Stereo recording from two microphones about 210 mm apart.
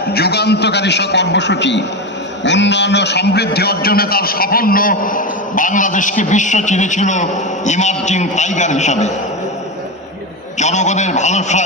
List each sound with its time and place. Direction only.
0.1 s a man's voice: 50° left (ahead or behind); by 9.1 s 35° left (ahead or behind)
10.6 s a man's voice: 35° left (ahead or behind)